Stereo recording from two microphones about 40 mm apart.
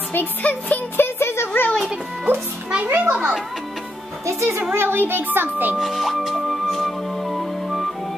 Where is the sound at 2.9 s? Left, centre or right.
Right.